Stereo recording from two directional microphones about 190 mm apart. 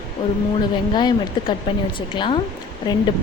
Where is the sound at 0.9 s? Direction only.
25° left (ahead or behind).